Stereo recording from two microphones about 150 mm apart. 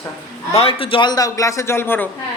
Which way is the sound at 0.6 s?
40° left (ahead or behind).